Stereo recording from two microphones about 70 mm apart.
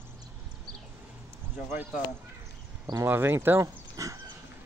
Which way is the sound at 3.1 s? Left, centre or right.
Right.